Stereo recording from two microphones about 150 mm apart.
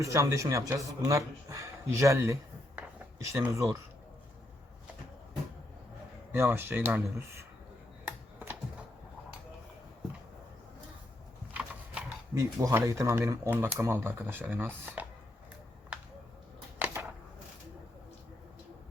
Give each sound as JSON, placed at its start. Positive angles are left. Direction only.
{"t": 0.0, "sound": "speech", "side_deg": -20}
{"t": 6.3, "sound": "speech", "side_deg": -15}
{"t": 8.0, "sound": "computer keyboard", "side_deg": -10}
{"t": 11.5, "sound": "a sound", "side_deg": -10}
{"t": 12.3, "sound": "speech", "side_deg": -20}
{"t": 16.7, "sound": "a sound", "side_deg": -15}